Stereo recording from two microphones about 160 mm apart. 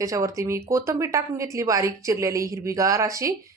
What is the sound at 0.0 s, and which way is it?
A woman's voice, 20° right (ahead or behind).